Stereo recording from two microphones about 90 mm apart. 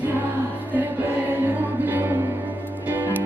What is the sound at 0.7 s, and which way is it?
Music, 20° right (ahead or behind).